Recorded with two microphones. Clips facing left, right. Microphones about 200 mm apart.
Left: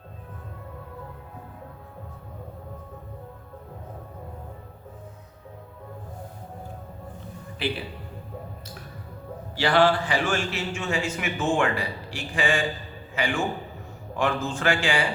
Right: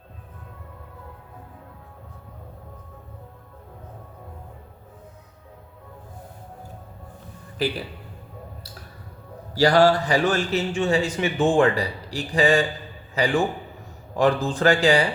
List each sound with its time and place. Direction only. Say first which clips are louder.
7.6 s a man's voice: right 4 dB; 40° right (ahead or behind)
9.6 s a man's voice: right 4 dB; 40° right (ahead or behind)